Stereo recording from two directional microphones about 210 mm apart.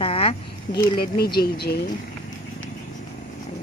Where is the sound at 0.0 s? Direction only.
25° left (ahead or behind).